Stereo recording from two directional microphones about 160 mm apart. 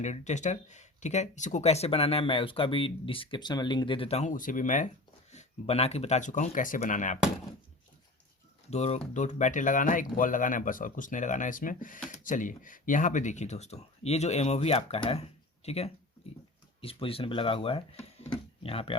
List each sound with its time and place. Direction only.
0.0 s speech: 50° left (ahead or behind)
5.3 s speech: 45° left (ahead or behind)
8.7 s speech: 45° left (ahead or behind)
18.3 s a sound: 35° left (ahead or behind)